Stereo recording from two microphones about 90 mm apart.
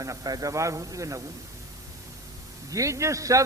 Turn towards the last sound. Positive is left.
turn(degrees=-35)  # may be behind; listen again after turning